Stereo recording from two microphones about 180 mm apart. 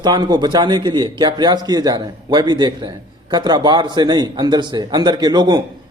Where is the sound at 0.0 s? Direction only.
20° right (ahead or behind).